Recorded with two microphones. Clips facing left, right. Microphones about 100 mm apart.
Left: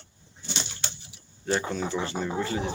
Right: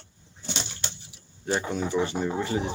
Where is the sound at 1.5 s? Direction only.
15° right (ahead or behind).